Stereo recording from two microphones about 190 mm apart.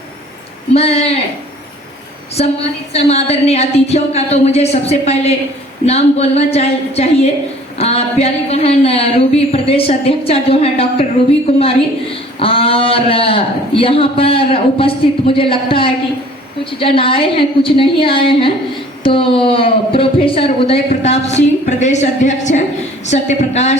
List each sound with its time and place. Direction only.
0.7 s speech: 35° left (ahead or behind)
2.4 s speech: 35° left (ahead or behind)
12.4 s a woman's voice: 30° left (ahead or behind)